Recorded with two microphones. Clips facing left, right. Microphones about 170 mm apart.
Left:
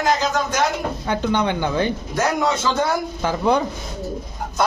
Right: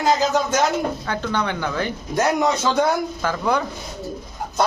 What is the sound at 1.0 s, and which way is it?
Speech, 20° left (ahead or behind).